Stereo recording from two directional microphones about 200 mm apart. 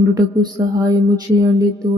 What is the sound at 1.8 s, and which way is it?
Music, 30° right (ahead or behind).